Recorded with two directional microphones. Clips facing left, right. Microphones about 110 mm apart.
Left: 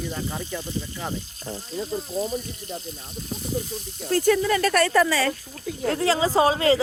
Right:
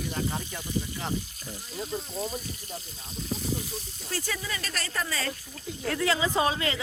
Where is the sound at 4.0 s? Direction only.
50° left (ahead or behind); by 5.3 s 90° left.